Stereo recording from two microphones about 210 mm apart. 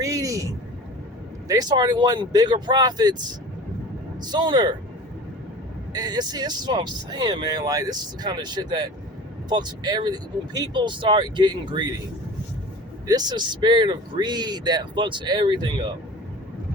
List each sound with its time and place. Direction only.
0.0 s a sound: 15° right (ahead or behind)
1.5 s speech: 20° right (ahead or behind)
5.9 s speech: 20° right (ahead or behind)
13.1 s speech: 20° right (ahead or behind)